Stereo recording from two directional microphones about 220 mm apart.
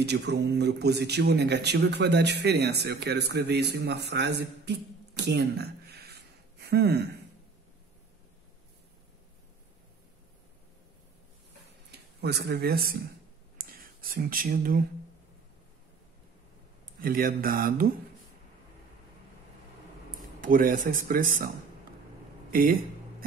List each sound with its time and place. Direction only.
0.0 s speech: 50° right (ahead or behind)
11.9 s speech: 50° right (ahead or behind)
13.6 s a sound: 40° right (ahead or behind)
17.0 s mantra: 40° right (ahead or behind)
20.1 s speech: 40° right (ahead or behind)
22.5 s speech: 40° right (ahead or behind)